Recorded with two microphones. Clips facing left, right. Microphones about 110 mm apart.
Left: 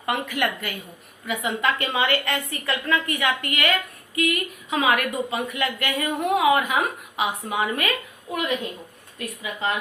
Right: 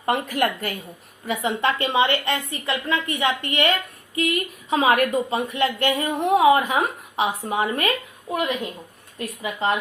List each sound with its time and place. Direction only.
0.0 s a woman's voice: 40° right (ahead or behind)